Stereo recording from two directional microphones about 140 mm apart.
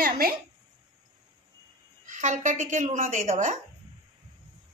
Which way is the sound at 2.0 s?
60° right (ahead or behind).